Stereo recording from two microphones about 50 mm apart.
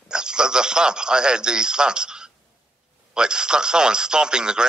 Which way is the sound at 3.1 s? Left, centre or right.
Centre.